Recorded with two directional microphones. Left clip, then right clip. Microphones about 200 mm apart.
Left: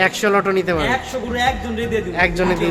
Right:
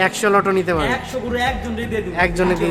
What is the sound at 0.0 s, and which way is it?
A man's voice, 5° right (ahead or behind).